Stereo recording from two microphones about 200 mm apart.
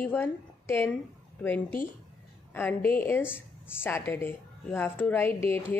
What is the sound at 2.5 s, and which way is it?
A woman's voice, 10° left (ahead or behind).